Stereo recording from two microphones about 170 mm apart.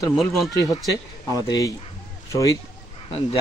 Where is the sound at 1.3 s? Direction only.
20° left (ahead or behind).